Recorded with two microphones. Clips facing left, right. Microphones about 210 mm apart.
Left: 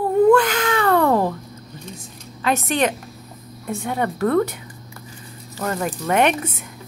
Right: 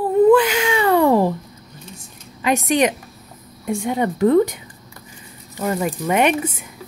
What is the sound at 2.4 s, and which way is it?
Speech, 15° right (ahead or behind).